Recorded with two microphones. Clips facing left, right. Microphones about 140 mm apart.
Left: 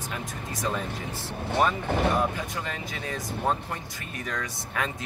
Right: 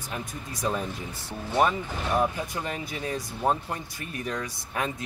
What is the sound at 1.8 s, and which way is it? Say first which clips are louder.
Speech: left 8 dB; 65° left (ahead or behind).